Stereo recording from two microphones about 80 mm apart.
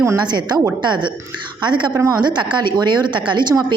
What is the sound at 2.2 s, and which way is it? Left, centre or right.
Speech, right.